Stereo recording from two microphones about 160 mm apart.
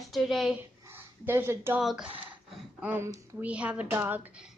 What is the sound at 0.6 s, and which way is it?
Speech, 10° right (ahead or behind).